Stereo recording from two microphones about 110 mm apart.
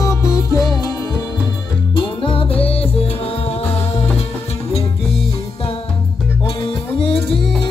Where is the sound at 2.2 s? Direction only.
55° left (ahead or behind).